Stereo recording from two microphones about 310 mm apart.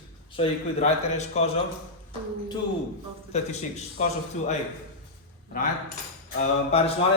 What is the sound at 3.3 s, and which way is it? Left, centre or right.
Speech, left.